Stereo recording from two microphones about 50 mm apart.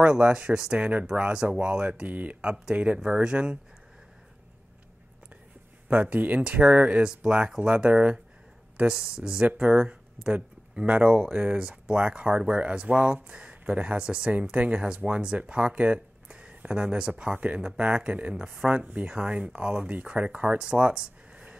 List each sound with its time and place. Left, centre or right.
0.0 s speech: centre
0.7 s speech: right
2.4 s speech: centre
2.7 s speech: right
5.9 s speech: right
7.0 s speech: centre
9.7 s speech: right